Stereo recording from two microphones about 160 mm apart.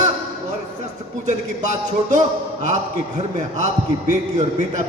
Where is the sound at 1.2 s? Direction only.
50° right (ahead or behind).